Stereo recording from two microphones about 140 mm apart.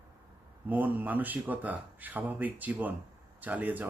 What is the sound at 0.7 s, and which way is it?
Speech, 10° right (ahead or behind).